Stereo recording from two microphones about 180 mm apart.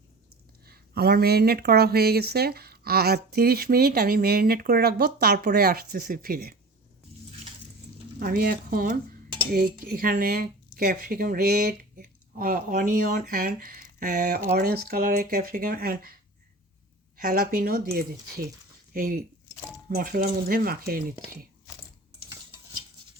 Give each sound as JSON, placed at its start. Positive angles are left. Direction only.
{"t": 0.7, "sound": "speech", "side_deg": -60}
{"t": 8.2, "sound": "speech", "side_deg": -55}
{"t": 17.2, "sound": "speech", "side_deg": -55}